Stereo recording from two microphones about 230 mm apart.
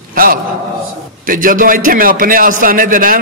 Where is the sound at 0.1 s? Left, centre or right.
Right.